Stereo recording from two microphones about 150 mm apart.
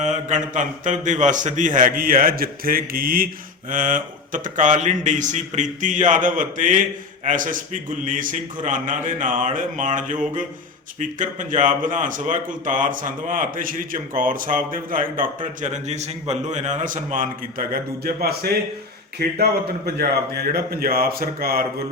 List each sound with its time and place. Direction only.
0.0 s a man's voice: 55° right (ahead or behind)
15.6 s speech: 50° right (ahead or behind)
17.7 s a man's voice: 90° right